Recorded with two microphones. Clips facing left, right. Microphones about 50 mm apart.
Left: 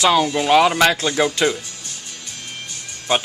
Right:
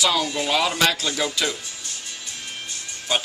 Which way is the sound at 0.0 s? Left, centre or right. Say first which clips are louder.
Left 6 dB; left.